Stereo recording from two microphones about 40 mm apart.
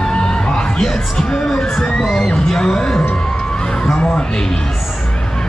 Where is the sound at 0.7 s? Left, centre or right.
Centre.